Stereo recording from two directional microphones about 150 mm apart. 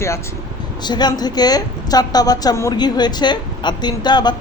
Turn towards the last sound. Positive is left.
turn(degrees=30)  # may be behind; listen again after turning